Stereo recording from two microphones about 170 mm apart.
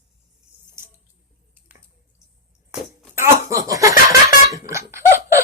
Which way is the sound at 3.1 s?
15° right (ahead or behind).